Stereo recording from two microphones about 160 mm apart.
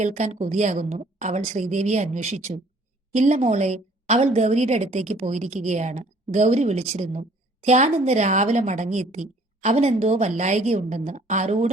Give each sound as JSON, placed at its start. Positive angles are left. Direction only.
{"t": 0.0, "sound": "a woman's voice", "side_deg": -45}